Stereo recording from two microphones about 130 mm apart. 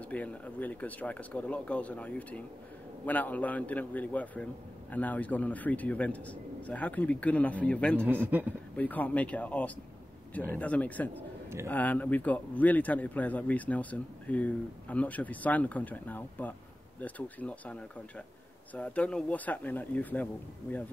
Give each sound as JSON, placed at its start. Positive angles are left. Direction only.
{"t": 0.0, "sound": "speech", "side_deg": 10}
{"t": 8.0, "sound": "a man's voice", "side_deg": -15}
{"t": 8.7, "sound": "speech", "side_deg": 10}